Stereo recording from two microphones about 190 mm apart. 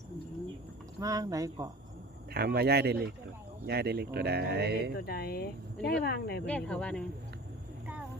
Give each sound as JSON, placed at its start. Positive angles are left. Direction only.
{"t": 0.9, "sound": "speech", "side_deg": -20}
{"t": 2.3, "sound": "speech", "side_deg": -55}
{"t": 4.9, "sound": "speech", "side_deg": 55}
{"t": 6.4, "sound": "speech", "side_deg": 5}